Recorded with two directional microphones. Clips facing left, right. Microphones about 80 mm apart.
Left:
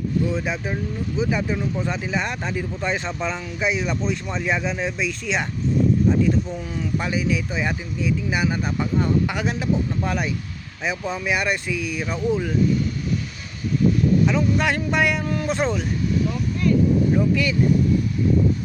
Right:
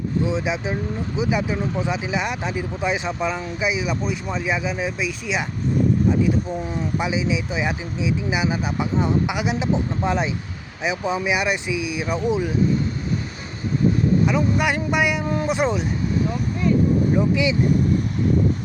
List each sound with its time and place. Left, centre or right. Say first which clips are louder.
0.3 s speech: right 2 dB; centre
6.6 s speech: right 3 dB; right
7.0 s speech: right 1 dB; centre
14.3 s speech: even; centre
16.1 s vehicle: right 1 dB; right
17.2 s speech: right 1 dB; centre